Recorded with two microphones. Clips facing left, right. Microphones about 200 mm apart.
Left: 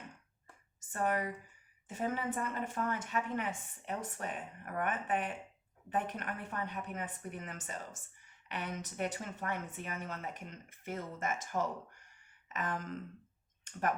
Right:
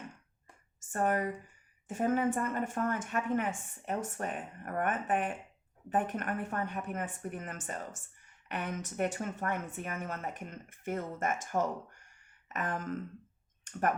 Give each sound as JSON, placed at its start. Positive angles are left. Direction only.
{"t": 0.9, "sound": "a woman's voice", "side_deg": -45}